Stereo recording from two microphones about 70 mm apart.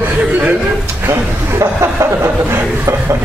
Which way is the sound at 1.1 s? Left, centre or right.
Right.